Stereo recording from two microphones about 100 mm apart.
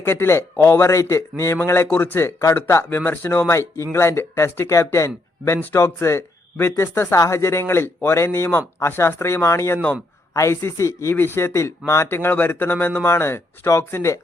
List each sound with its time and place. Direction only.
0.0 s speech: 25° left (ahead or behind)